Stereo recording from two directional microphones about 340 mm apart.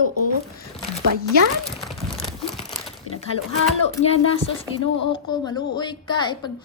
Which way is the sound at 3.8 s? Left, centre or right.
Centre.